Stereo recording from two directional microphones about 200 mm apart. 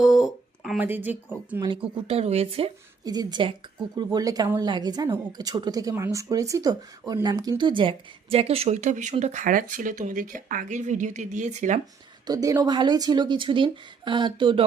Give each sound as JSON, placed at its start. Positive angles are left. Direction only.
{"t": 0.0, "sound": "speech", "side_deg": 0}
{"t": 2.0, "sound": "speech", "side_deg": -30}
{"t": 12.2, "sound": "speech", "side_deg": -20}